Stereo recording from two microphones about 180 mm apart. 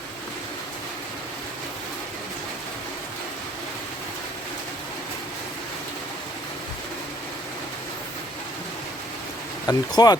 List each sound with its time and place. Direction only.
9.6 s speech: 20° left (ahead or behind)